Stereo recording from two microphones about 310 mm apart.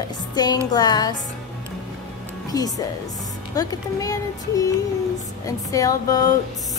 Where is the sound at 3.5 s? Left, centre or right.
Centre.